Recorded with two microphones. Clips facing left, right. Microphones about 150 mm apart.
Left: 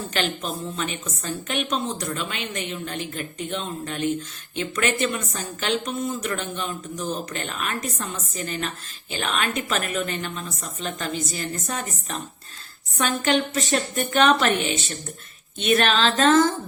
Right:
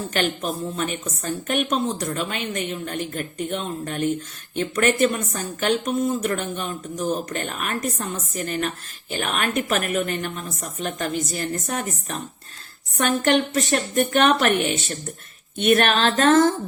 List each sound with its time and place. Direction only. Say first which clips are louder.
0.8 s a woman's voice: right 3 dB; 45° right (ahead or behind)